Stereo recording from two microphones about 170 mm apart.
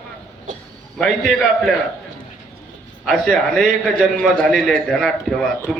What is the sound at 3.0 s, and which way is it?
Speech, centre (ahead or behind).